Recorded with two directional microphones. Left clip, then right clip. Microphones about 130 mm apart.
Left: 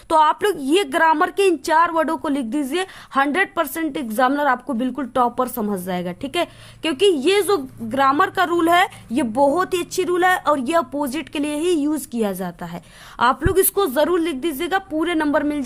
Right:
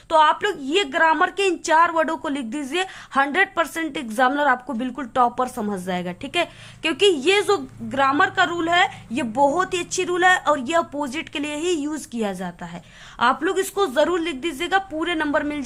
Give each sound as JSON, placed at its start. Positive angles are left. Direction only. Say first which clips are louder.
{"t": 0.1, "sound": "speech", "louder": "left 1 dB", "side_deg": 70}
{"t": 9.1, "sound": "speech", "louder": "left 2 dB", "side_deg": 40}